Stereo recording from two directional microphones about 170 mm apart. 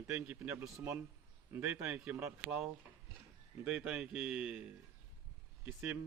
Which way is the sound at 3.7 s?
5° right (ahead or behind).